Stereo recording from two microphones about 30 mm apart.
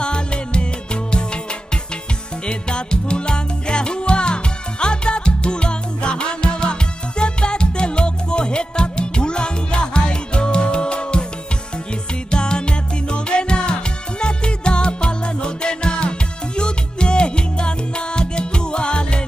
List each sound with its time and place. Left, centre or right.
0.0 s music: left
2.4 s music: left
12.3 s music: left